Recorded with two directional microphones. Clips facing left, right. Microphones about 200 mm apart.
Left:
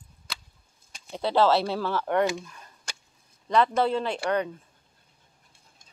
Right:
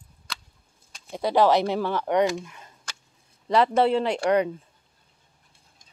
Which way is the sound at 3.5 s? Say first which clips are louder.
Right 3 dB; 30° right (ahead or behind).